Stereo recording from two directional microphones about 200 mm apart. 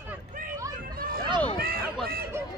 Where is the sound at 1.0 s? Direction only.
50° right (ahead or behind).